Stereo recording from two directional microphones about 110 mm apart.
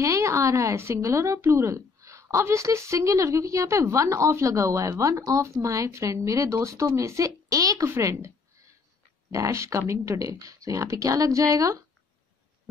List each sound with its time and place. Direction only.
0.0 s speech: 25° right (ahead or behind)
9.3 s speech: 30° right (ahead or behind)